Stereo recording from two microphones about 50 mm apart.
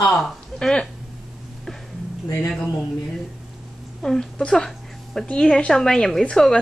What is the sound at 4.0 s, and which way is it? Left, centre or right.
A woman's voice, centre.